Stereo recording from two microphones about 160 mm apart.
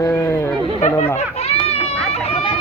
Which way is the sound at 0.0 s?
15° left (ahead or behind).